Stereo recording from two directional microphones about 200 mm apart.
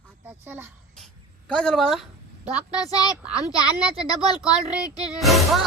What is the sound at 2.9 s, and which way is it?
Speech, 20° left (ahead or behind).